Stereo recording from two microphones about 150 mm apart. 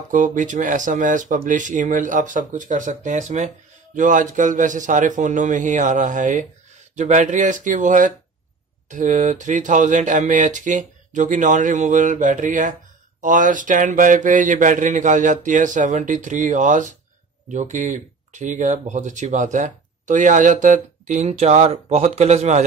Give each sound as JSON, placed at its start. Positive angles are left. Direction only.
{"t": 0.1, "sound": "speech", "side_deg": -60}